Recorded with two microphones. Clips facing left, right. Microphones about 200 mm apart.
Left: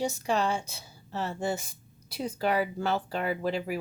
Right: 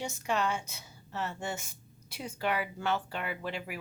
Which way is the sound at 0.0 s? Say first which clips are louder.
Left 4 dB; 35° left (ahead or behind).